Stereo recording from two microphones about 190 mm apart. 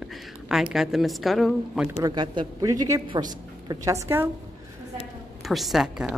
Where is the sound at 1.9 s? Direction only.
20° right (ahead or behind).